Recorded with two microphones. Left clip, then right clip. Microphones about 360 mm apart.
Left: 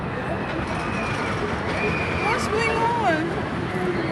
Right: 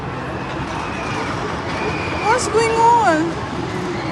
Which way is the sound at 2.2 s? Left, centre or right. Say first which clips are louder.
Right 8 dB; centre.